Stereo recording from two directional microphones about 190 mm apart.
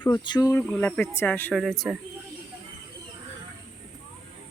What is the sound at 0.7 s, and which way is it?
Speech, 5° left (ahead or behind).